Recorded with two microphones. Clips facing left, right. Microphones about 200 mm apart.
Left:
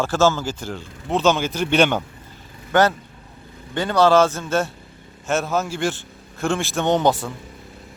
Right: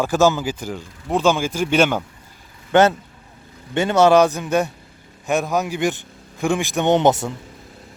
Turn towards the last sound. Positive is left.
turn(degrees=-20)  # may be behind; listen again after turning